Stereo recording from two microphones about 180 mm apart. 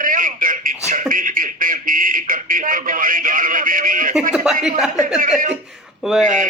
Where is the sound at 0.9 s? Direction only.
50° right (ahead or behind).